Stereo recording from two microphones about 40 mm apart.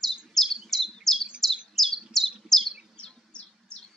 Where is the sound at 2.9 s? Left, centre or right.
Left.